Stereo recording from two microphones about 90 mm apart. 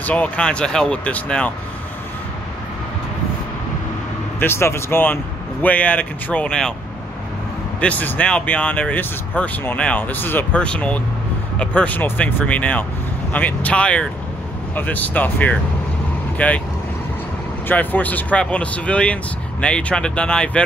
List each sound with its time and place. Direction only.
0.0 s speech: 15° left (ahead or behind)
4.4 s speech: 30° left (ahead or behind); by 6.7 s 10° left (ahead or behind)
7.8 s speech: 20° left (ahead or behind)
17.6 s speech: 20° left (ahead or behind)